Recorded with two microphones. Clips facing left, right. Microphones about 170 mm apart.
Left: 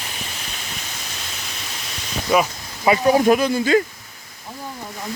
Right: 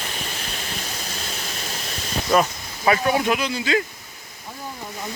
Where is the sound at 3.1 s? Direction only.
40° left (ahead or behind).